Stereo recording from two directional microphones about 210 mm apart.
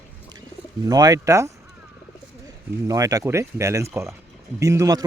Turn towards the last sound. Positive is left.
turn(degrees=-15)  # may be behind; listen again after turning